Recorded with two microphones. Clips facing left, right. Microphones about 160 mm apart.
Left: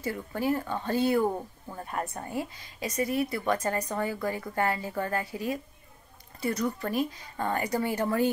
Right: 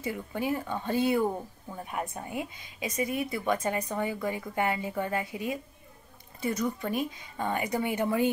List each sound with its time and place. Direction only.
0.3 s a woman's voice: 15° right (ahead or behind)
6.6 s speech: 5° right (ahead or behind)